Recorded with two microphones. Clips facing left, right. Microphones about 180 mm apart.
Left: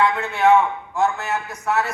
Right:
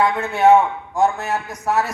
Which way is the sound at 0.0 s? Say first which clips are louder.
Right 2 dB; 35° right (ahead or behind).